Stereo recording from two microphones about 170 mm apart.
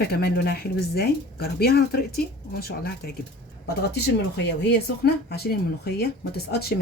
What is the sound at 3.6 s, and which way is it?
Speech, 80° left.